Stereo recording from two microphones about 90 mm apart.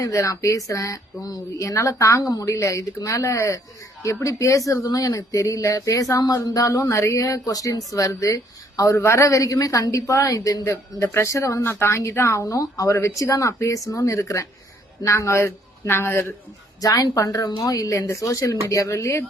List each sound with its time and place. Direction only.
0.0 s speech: 35° left (ahead or behind)
16.8 s speech: 45° left (ahead or behind)